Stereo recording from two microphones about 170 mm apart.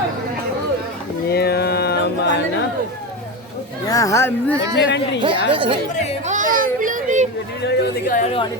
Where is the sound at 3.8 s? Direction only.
20° left (ahead or behind).